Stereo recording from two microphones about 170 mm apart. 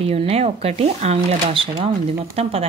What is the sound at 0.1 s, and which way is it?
A woman's voice, 35° right (ahead or behind).